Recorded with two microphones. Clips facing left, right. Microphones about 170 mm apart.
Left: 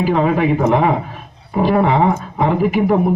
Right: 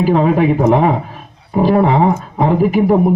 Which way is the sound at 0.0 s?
40° right (ahead or behind).